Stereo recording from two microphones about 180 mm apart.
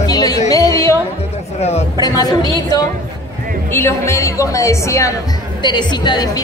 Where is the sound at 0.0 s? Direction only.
20° left (ahead or behind).